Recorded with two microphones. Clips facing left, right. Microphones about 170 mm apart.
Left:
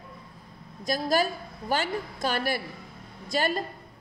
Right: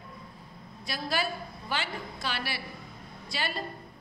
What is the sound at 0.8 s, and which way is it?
A woman's voice, 45° left (ahead or behind).